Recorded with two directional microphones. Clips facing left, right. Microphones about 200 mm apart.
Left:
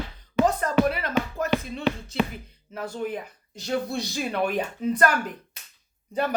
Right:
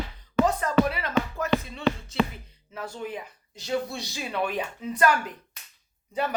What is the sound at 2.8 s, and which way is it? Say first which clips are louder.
Speech: left 4 dB; 55° left (ahead or behind).